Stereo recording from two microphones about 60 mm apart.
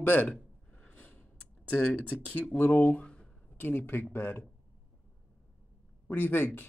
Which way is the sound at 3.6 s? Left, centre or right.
Left.